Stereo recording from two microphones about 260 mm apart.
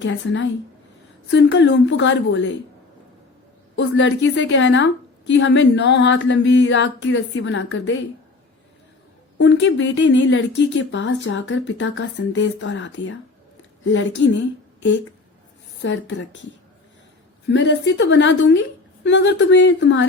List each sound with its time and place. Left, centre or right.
0.0 s a woman's voice: left
3.8 s a woman's voice: left
9.4 s a woman's voice: left
15.8 s a woman's voice: left
17.5 s a woman's voice: left